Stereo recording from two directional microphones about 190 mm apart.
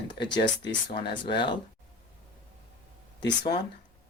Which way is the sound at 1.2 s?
25° left (ahead or behind).